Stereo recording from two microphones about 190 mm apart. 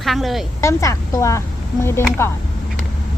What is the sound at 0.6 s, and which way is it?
Speech, 15° left (ahead or behind).